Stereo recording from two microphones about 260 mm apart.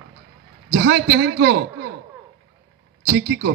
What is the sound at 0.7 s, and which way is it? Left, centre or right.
A man's voice, right.